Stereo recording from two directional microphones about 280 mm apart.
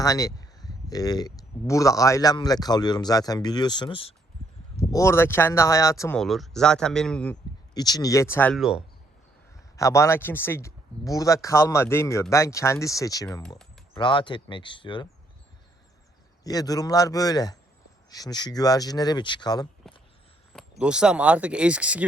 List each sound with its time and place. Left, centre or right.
0.0 s speech: centre
7.7 s speech: centre
9.7 s speech: centre
16.4 s speech: centre
19.9 s a sound: centre
20.5 s speech: centre